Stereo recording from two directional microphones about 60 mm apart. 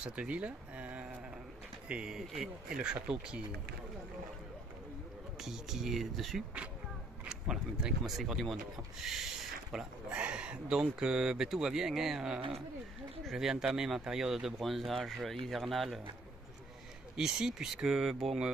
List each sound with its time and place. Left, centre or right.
0.0 s speech: right
1.9 s speech: centre
5.4 s speech: centre
7.2 s speech: centre
10.0 s speech: centre
17.2 s speech: centre